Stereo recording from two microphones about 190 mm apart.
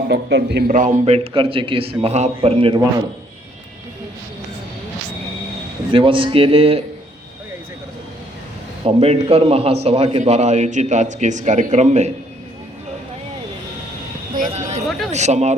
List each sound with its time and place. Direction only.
0.1 s a man's voice: 65° right (ahead or behind)
0.7 s a man's voice: 40° right (ahead or behind)
5.9 s a man's voice: 25° right (ahead or behind)
8.8 s a man's voice: 30° right (ahead or behind)
14.3 s speech: 45° right (ahead or behind)
14.8 s speech: centre (ahead or behind)
15.1 s a man's voice: 35° right (ahead or behind)